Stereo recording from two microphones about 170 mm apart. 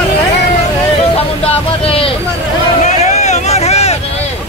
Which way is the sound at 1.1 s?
35° left (ahead or behind).